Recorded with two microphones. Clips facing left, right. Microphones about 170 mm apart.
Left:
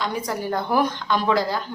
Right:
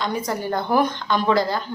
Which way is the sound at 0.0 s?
5° left (ahead or behind).